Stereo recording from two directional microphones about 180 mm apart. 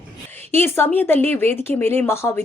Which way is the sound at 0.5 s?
10° left (ahead or behind).